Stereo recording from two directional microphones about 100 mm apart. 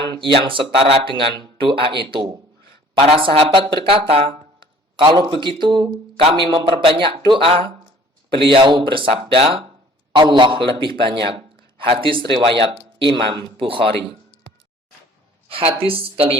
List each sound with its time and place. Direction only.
0.2 s speech: 60° right (ahead or behind)
3.0 s speech: 65° right (ahead or behind)
10.2 s speech: 50° right (ahead or behind)
15.4 s a woman's voice: 65° right (ahead or behind)